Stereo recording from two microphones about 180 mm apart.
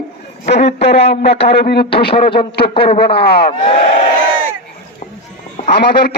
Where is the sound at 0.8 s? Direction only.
35° left (ahead or behind).